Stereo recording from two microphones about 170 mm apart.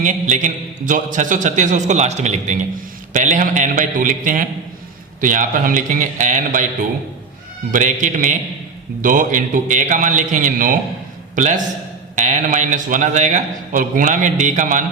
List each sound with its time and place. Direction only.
0.0 s a man's voice: 45° right (ahead or behind)
7.7 s a man's voice: 45° right (ahead or behind)